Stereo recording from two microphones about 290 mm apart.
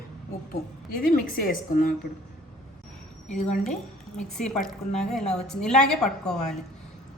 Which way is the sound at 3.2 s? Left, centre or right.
Left.